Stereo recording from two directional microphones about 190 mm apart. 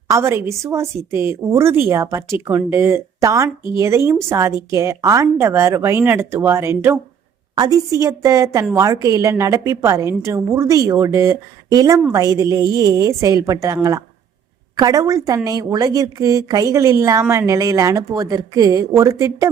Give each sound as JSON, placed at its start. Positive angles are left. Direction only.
{"t": 0.1, "sound": "speech", "side_deg": -15}
{"t": 14.8, "sound": "speech", "side_deg": -20}